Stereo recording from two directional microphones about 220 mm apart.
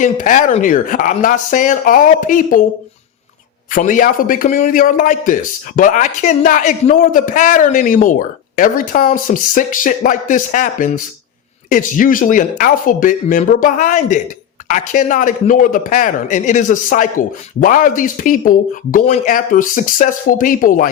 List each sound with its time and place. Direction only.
0.0 s speech: 35° left (ahead or behind)
3.7 s speech: 35° left (ahead or behind)